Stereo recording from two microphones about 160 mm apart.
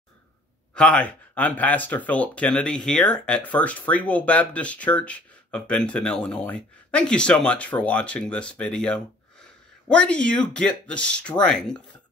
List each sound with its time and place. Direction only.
0.7 s speech: 5° left (ahead or behind)